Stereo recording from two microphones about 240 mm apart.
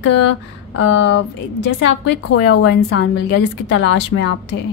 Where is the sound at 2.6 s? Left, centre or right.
Left.